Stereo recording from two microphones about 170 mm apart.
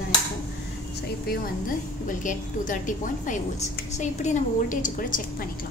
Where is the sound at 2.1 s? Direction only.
50° left (ahead or behind).